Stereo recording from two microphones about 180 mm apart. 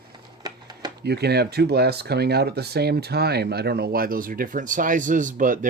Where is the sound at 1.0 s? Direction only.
65° right (ahead or behind).